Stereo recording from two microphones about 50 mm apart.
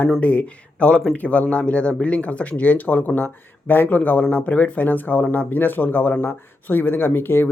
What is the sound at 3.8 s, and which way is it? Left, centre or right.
Speech, left.